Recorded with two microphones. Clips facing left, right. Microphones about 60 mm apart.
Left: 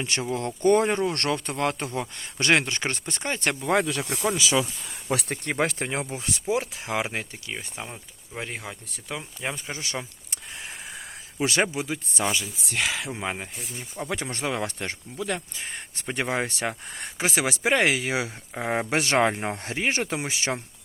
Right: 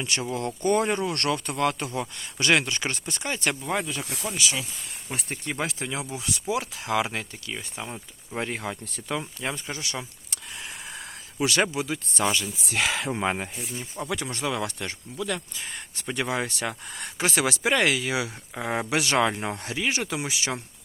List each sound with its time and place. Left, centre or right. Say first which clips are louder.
0.0 s speech: left 1 dB; left
3.7 s speech: left 5 dB; left
5.5 s speech: left 4 dB; left; by 7.9 s centre
8.4 s speech: right 4 dB; centre
9.0 s speech: right 2 dB; centre
9.7 s speech: left 1 dB; left
11.3 s speech: even; left
12.1 s speech: right 2 dB; centre
13.1 s speech: right 4 dB; centre
14.1 s speech: even; left
18.5 s speech: left 2 dB; centre
18.9 s speech: left 1 dB; left